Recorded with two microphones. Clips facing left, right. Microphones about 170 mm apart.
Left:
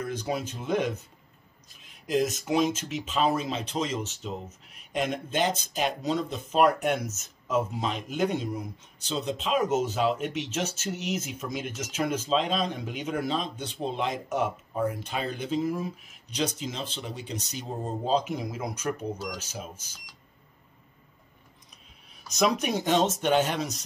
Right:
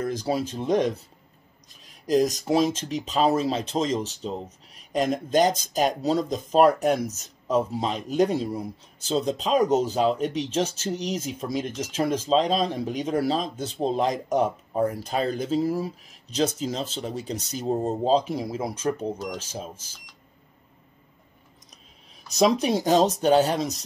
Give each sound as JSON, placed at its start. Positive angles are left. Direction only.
{"t": 0.0, "sound": "speech", "side_deg": -35}
{"t": 22.3, "sound": "speech", "side_deg": -35}